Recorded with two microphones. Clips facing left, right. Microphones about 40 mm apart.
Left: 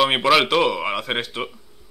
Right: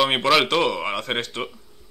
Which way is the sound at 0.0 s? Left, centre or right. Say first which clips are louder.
Left 2 dB; centre.